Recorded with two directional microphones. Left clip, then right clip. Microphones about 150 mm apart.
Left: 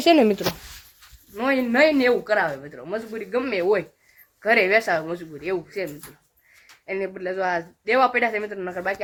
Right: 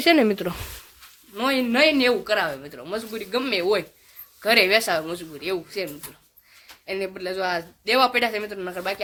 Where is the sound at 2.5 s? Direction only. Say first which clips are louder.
Left 1 dB; 15° right (ahead or behind).